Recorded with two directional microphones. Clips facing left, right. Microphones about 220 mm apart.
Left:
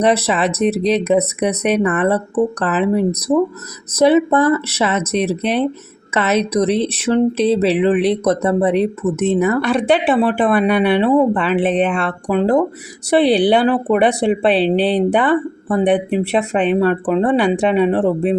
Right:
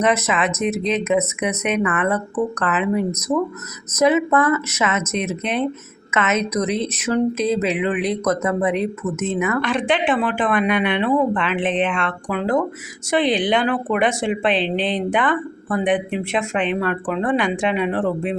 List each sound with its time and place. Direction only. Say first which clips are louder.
0.0 s speech: left 4 dB; 35° left (ahead or behind)